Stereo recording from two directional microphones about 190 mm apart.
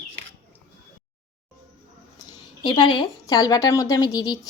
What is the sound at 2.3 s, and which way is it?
A woman's voice, 25° left (ahead or behind).